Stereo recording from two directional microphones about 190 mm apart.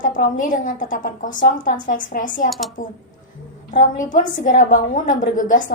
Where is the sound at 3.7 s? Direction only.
40° left (ahead or behind).